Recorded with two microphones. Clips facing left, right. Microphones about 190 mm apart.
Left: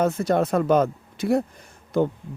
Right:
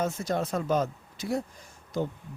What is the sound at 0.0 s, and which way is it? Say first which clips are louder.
Speech: left 8 dB; 60° left (ahead or behind).